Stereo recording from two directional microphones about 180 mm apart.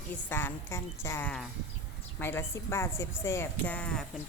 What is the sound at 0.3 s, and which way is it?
Speech, 10° left (ahead or behind).